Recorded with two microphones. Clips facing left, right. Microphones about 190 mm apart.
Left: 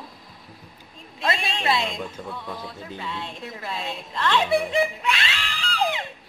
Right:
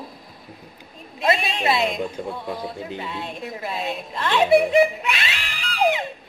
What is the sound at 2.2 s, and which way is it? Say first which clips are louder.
Speech: right 6 dB; 40° right (ahead or behind).